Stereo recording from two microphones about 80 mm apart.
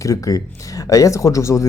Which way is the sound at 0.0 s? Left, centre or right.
Left.